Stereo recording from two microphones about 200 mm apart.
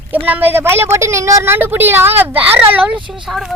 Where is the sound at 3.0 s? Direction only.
25° right (ahead or behind).